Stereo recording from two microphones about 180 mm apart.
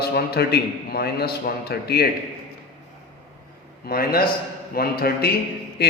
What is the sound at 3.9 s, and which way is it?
A man's voice, 55° left (ahead or behind).